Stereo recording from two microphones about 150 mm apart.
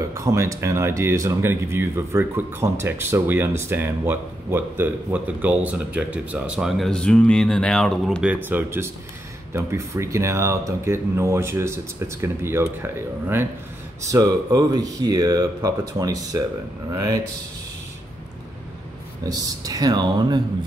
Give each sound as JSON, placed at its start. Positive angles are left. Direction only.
{"t": 0.1, "sound": "speech", "side_deg": -20}
{"t": 8.3, "sound": "speech", "side_deg": -15}
{"t": 19.2, "sound": "speech", "side_deg": -25}